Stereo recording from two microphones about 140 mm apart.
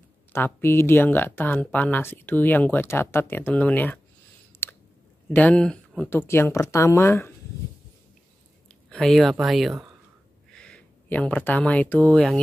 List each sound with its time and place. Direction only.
0.3 s speech: 15° left (ahead or behind)
4.6 s a sound: 15° left (ahead or behind)
5.3 s speech: 10° left (ahead or behind)
6.0 s speech: 15° left (ahead or behind)
8.6 s speech: 5° left (ahead or behind)